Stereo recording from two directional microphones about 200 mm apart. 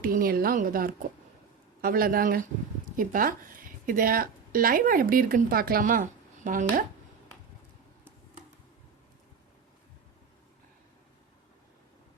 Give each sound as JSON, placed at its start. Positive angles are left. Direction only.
{"t": 0.0, "sound": "a woman's voice", "side_deg": -45}